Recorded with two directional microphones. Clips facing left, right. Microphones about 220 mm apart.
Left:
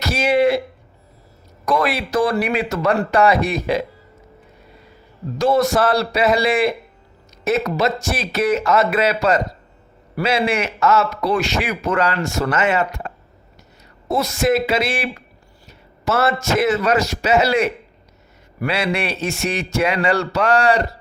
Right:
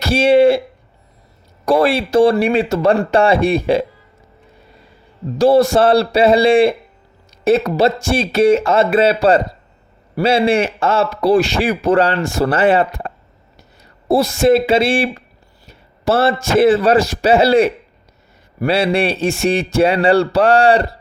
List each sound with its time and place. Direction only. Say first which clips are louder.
0.0 s speech: right 6 dB; 30° right (ahead or behind)
1.6 s a man's voice: right 6 dB; 30° right (ahead or behind)
5.4 s a man's voice: right 5 dB; 30° right (ahead or behind)